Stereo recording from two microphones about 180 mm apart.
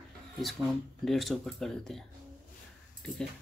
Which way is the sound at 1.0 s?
Centre (ahead or behind).